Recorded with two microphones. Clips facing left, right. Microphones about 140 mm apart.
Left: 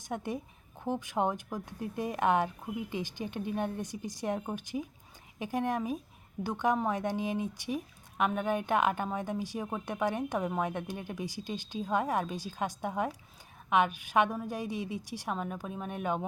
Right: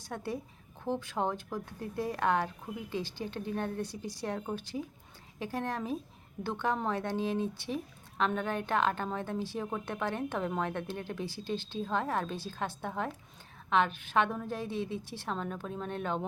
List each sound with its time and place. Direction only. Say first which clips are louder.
0.0 s a woman's voice: left 2 dB; 15° left (ahead or behind)